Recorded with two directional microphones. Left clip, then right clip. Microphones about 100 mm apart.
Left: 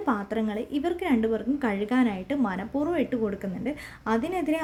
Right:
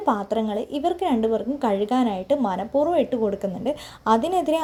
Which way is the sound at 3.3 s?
35° right (ahead or behind).